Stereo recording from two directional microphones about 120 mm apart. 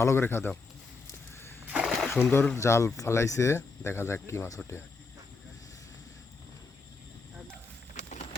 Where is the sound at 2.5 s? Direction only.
25° left (ahead or behind).